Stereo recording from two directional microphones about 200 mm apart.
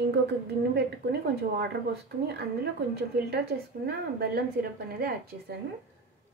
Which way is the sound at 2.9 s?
55° right (ahead or behind).